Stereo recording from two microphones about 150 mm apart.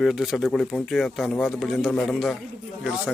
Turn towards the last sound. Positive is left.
turn(degrees=-5)  # may be behind; listen again after turning